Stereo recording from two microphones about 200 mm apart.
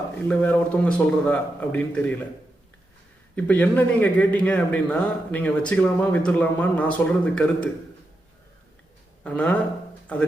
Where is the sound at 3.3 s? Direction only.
5° left (ahead or behind).